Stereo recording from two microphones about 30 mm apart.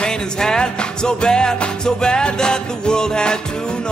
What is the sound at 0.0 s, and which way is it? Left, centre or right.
Music, left.